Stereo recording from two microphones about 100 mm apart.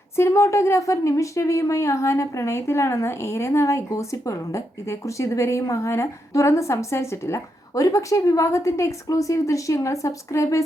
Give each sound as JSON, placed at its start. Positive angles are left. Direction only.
{"t": 0.2, "sound": "a woman's voice", "side_deg": 30}